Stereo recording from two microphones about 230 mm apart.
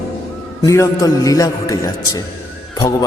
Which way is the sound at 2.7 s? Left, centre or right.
Centre.